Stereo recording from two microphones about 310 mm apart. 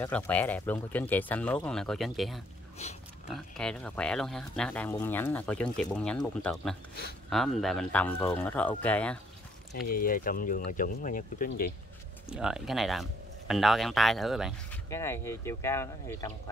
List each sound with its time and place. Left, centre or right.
0.0 s speech: centre
9.8 s speech: left
12.3 s speech: centre